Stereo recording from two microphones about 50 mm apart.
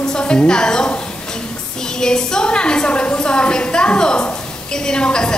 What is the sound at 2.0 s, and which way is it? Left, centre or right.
A woman's voice, centre.